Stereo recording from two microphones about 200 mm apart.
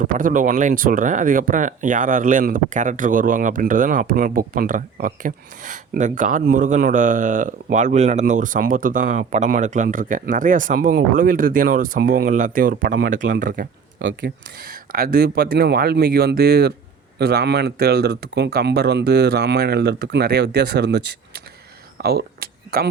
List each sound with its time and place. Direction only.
0.0 s speech: 40° right (ahead or behind)
13.5 s speech: 65° right (ahead or behind)
21.9 s a sound: 50° right (ahead or behind)